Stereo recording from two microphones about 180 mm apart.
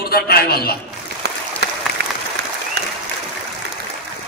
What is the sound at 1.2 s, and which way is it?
Applause, 70° right (ahead or behind).